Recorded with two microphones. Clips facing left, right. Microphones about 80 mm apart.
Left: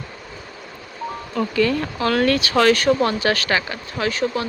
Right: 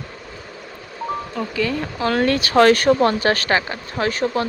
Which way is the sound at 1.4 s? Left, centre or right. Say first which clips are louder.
Left 5 dB; centre.